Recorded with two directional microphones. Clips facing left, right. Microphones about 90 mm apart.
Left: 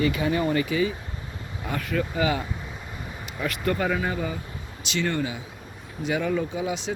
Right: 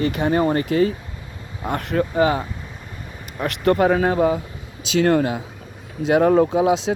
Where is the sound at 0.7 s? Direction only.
60° right (ahead or behind).